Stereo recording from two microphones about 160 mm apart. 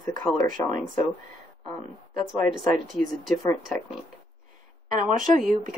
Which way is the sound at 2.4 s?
55° right (ahead or behind).